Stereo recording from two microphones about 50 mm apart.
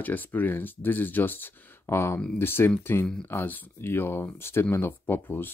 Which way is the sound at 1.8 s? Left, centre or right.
Left.